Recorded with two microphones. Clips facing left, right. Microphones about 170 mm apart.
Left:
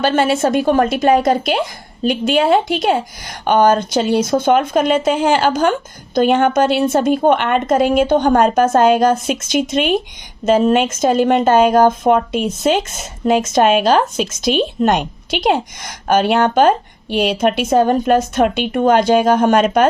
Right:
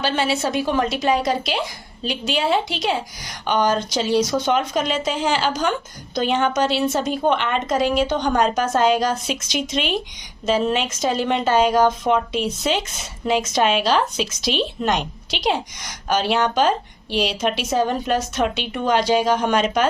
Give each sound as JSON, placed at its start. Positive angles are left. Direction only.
{"t": 0.0, "sound": "a woman's voice", "side_deg": 50}